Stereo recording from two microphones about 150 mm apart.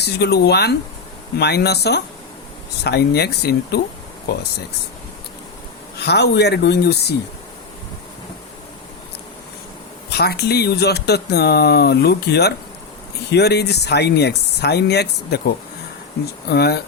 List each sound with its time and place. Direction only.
0.0 s speech: 90° left
6.0 s speech: 90° left
10.1 s speech: 90° left
16.5 s speech: 90° left